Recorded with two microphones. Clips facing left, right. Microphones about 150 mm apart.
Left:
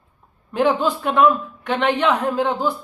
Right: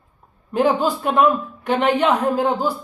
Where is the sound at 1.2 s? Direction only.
40° right (ahead or behind).